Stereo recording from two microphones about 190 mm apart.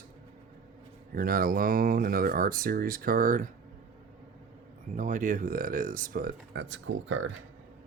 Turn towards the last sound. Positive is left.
turn(degrees=-90)